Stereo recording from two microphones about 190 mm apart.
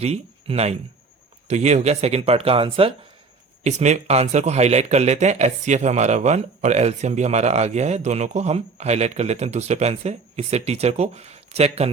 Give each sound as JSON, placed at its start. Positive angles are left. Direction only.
{"t": 0.0, "sound": "speech", "side_deg": -35}